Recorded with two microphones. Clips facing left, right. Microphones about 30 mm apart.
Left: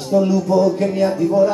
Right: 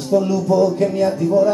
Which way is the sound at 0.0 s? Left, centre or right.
Centre.